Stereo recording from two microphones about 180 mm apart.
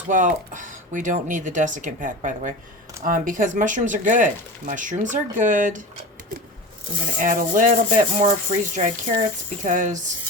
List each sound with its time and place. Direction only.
0.1 s speech: 45° right (ahead or behind)
7.2 s speech: 45° right (ahead or behind)